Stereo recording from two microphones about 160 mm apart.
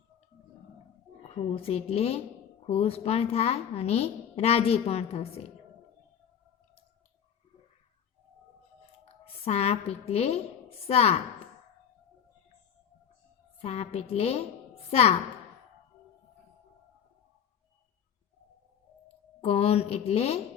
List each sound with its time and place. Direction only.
1.5 s a woman's voice: 35° left (ahead or behind)
9.0 s a woman's voice: 40° left (ahead or behind)
13.6 s a woman's voice: 40° left (ahead or behind)
19.4 s a woman's voice: 40° left (ahead or behind)